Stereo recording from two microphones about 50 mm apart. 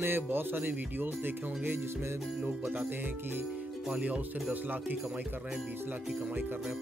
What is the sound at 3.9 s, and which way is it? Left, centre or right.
Speech, right.